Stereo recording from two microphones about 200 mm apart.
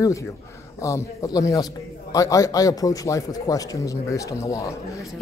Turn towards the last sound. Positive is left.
turn(degrees=15)  # may be behind; listen again after turning